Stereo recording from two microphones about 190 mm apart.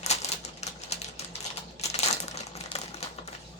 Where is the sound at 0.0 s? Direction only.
35° left (ahead or behind).